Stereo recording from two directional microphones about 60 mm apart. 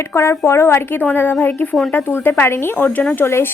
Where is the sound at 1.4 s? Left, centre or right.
Left.